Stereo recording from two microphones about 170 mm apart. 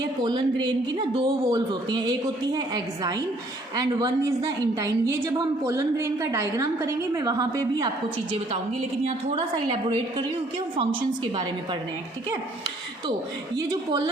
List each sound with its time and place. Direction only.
0.2 s a woman's voice: 25° right (ahead or behind)
4.4 s a woman's voice: 20° right (ahead or behind)
9.0 s a woman's voice: 30° right (ahead or behind)
10.8 s a woman's voice: 30° right (ahead or behind)
13.6 s a woman's voice: 20° right (ahead or behind)